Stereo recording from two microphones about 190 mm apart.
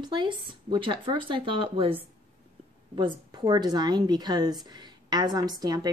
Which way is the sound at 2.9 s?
20° right (ahead or behind).